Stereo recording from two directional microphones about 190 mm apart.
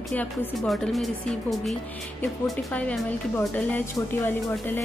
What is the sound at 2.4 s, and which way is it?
A woman's voice, 5° left (ahead or behind).